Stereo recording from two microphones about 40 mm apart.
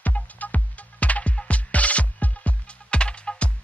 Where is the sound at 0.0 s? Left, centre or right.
Left.